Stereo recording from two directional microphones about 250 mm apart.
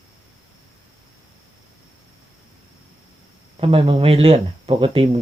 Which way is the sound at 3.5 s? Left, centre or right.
Right.